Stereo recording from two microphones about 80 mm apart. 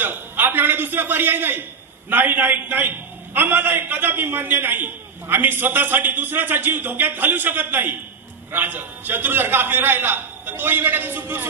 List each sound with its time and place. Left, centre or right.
0.0 s a man's voice: right